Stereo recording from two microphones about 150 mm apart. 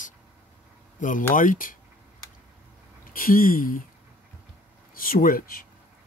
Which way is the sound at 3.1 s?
70° left (ahead or behind).